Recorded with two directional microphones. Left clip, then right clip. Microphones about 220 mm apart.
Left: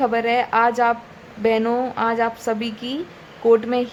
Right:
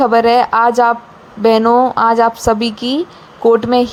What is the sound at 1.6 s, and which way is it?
Speech, 5° right (ahead or behind).